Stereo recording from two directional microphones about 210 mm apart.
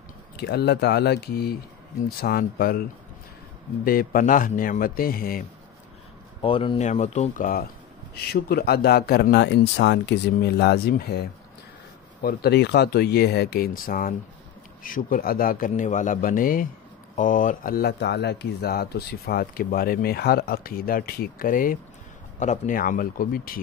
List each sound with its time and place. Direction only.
0.4 s speech: 50° left (ahead or behind)
3.8 s speech: 45° left (ahead or behind)
6.4 s speech: 25° left (ahead or behind); by 23.6 s 45° left (ahead or behind)